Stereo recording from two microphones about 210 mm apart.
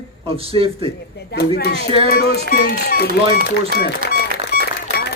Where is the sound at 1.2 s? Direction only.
50° left (ahead or behind).